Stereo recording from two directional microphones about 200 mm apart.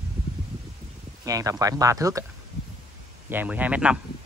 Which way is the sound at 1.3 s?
15° right (ahead or behind).